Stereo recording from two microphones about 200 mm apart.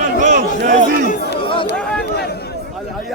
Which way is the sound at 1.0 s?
50° left (ahead or behind).